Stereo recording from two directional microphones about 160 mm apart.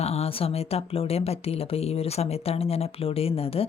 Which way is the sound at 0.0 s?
40° left (ahead or behind).